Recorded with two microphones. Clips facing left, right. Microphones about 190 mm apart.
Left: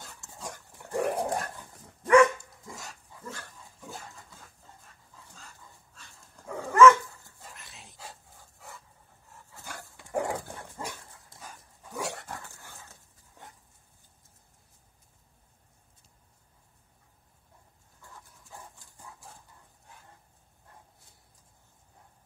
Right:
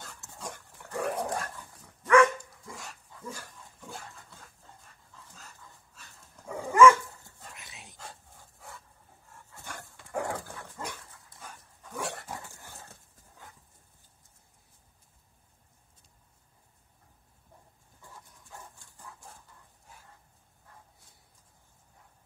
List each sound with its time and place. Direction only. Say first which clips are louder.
0.0 s dog: even; centre (ahead or behind)
0.9 s dog: left 3 dB; 30° left (ahead or behind)
1.3 s dog: left 2 dB; 20° left (ahead or behind)
2.6 s dog: even; centre (ahead or behind)
3.3 s dog: right 1 dB; 10° right (ahead or behind)
5.9 s dog: even; 5° right (ahead or behind)
7.3 s dog: even; centre (ahead or behind)
10.1 s dog: left 3 dB; 20° left (ahead or behind)
11.4 s dog: even; centre (ahead or behind)
12.3 s dog: right 1 dB; 10° right (ahead or behind)
18.1 s dog: left 1 dB; centre (ahead or behind)